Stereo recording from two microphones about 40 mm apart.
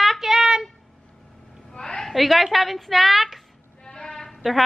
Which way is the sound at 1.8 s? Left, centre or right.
Centre.